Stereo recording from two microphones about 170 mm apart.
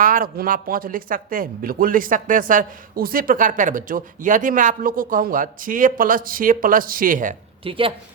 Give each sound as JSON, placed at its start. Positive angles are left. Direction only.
{"t": 0.0, "sound": "speech", "side_deg": -55}
{"t": 7.6, "sound": "speech", "side_deg": -30}